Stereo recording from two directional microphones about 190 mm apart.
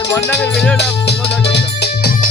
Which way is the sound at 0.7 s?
60° left (ahead or behind).